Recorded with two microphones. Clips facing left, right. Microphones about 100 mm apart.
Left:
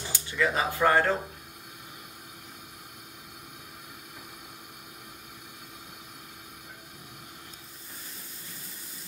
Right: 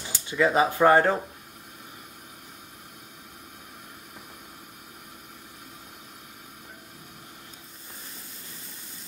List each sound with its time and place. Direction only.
0.0 s speech: 20° right (ahead or behind)